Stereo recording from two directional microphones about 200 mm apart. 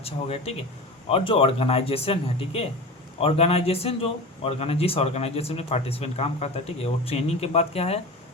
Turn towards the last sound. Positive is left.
turn(degrees=30)  # may be behind; listen again after turning